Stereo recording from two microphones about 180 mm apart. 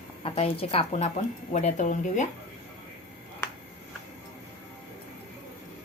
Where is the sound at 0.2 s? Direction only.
30° left (ahead or behind).